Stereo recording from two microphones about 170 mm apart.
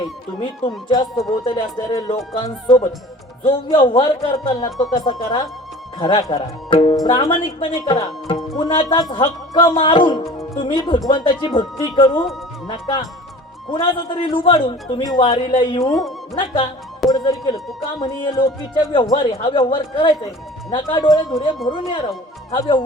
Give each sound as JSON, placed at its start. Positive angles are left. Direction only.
{"t": 0.0, "sound": "a man's voice", "side_deg": 25}